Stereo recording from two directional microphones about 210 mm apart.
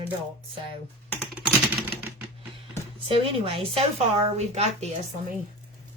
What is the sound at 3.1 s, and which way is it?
A woman's voice, 25° right (ahead or behind).